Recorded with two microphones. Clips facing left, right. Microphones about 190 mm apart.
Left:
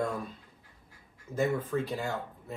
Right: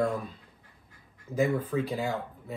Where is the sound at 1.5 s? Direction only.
10° right (ahead or behind).